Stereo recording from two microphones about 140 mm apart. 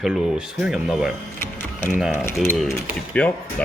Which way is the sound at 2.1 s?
15° left (ahead or behind).